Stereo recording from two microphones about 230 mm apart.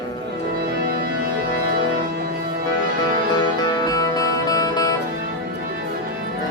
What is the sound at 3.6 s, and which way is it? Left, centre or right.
Music, centre.